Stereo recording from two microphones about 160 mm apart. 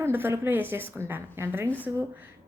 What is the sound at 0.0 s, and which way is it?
A woman's voice, 15° right (ahead or behind).